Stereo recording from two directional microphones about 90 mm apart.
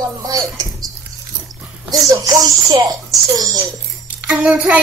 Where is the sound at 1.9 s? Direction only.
40° right (ahead or behind).